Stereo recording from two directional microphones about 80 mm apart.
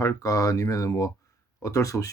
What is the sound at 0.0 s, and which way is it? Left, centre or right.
Speech, left.